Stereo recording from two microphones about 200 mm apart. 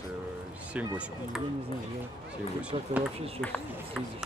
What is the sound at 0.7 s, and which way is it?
Speech, 5° right (ahead or behind).